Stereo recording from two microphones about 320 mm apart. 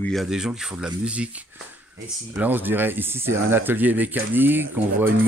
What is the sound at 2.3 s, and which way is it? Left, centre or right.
Speech, centre.